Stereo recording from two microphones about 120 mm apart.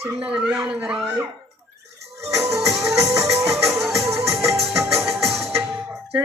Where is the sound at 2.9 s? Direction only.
25° right (ahead or behind).